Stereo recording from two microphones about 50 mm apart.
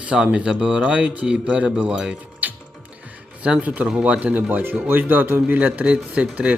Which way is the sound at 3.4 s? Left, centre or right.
Right.